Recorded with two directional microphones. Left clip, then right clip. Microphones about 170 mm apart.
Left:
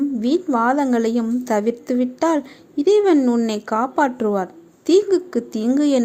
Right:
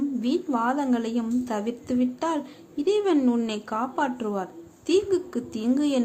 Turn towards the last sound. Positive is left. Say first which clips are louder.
# left 7 dB
turn(degrees=35)  # may be behind; listen again after turning